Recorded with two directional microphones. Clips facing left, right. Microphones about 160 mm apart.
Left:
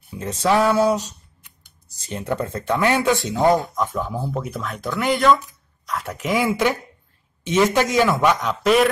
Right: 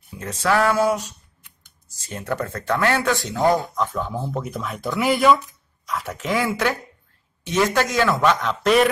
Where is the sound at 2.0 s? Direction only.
20° left (ahead or behind).